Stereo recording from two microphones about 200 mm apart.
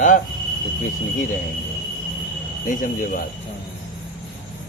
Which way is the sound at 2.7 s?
40° left (ahead or behind).